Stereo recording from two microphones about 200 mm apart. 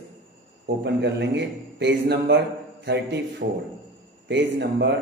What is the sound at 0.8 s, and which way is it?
A man's voice, 60° right (ahead or behind).